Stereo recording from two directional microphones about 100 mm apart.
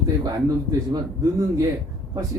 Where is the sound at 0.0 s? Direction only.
40° right (ahead or behind).